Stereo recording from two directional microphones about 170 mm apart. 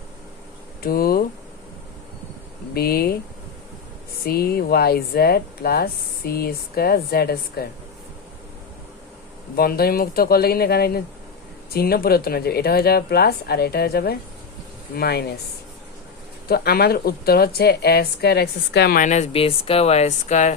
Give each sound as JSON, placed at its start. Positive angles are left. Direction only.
{"t": 0.8, "sound": "speech", "side_deg": 60}
{"t": 2.7, "sound": "speech", "side_deg": 65}
{"t": 4.3, "sound": "speech", "side_deg": 65}
{"t": 9.6, "sound": "speech", "side_deg": 65}
{"t": 16.5, "sound": "speech", "side_deg": 65}
{"t": 19.0, "sound": "speech", "side_deg": 45}